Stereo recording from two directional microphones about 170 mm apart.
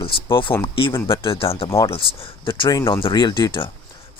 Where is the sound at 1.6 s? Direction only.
20° left (ahead or behind).